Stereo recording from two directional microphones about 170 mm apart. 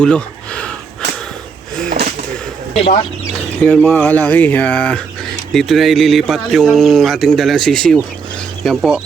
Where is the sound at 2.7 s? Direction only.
35° left (ahead or behind).